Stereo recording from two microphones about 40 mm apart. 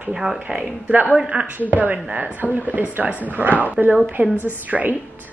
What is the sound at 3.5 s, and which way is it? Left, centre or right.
Speech, left.